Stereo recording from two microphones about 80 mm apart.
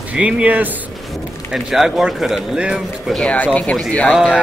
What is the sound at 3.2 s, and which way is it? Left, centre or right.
Speech, centre.